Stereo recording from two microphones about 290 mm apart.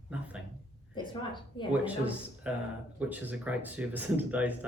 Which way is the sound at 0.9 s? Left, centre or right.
Centre.